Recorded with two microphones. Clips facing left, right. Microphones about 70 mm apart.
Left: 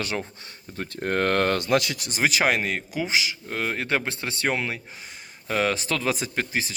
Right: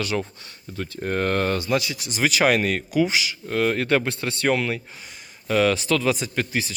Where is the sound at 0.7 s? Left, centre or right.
Left.